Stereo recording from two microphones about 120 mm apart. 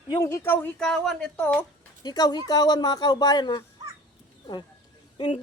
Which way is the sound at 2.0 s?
35° left (ahead or behind).